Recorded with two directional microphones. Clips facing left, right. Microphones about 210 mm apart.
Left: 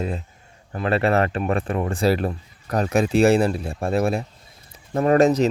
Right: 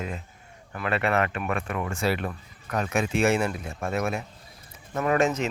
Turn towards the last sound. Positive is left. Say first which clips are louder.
# left 7 dB
turn(degrees=35)  # may be behind; listen again after turning